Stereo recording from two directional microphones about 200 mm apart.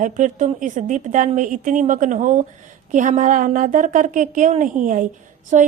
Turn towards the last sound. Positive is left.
turn(degrees=-35)  # may be behind; listen again after turning